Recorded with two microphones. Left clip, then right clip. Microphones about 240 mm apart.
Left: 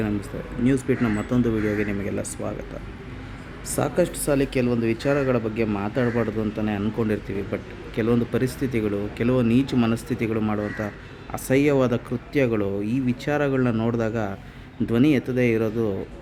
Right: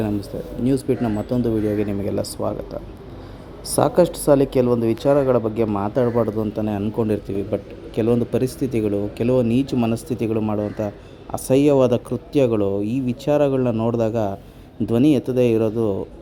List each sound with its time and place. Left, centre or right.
0.0 s speech: centre
3.7 s speech: centre